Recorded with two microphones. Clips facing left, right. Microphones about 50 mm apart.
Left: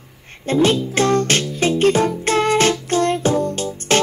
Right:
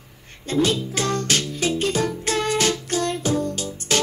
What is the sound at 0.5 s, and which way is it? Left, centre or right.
Music, left.